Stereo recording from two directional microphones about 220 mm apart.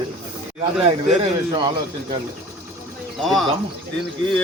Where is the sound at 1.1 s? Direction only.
25° right (ahead or behind).